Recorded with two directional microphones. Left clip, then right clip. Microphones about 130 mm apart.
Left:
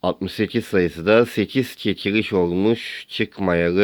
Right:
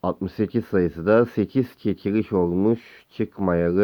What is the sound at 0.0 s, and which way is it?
Speech, 15° left (ahead or behind).